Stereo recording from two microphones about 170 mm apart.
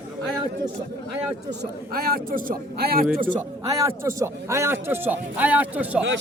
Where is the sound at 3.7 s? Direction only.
15° right (ahead or behind).